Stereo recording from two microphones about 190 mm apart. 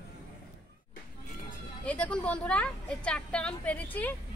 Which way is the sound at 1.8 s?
5° left (ahead or behind).